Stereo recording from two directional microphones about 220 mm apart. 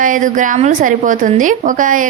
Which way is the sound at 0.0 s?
35° right (ahead or behind).